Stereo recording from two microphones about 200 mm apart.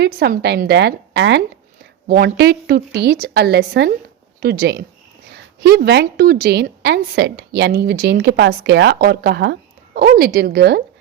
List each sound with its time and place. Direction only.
0.0 s a woman's voice: 55° right (ahead or behind)
2.0 s a woman's voice: 50° right (ahead or behind)